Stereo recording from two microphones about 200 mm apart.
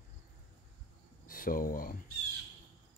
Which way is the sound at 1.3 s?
45° left (ahead or behind).